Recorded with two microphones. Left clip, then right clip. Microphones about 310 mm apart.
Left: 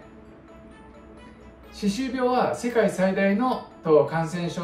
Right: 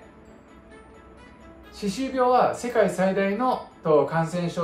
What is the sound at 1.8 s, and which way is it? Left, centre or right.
Speech, centre.